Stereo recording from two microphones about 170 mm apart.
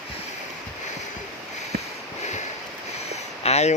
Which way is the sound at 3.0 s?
40° left (ahead or behind).